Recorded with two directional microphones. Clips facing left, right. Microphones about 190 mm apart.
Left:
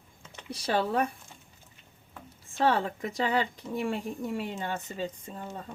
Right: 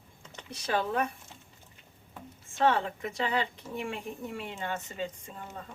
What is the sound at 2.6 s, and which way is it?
Speech, 35° left (ahead or behind).